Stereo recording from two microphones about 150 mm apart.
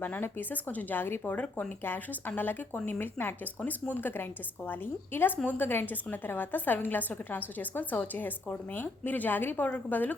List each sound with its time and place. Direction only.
0.0 s speech: 10° left (ahead or behind)